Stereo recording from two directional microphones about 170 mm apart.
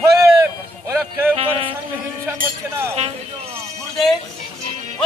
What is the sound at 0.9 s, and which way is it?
Music, 15° right (ahead or behind).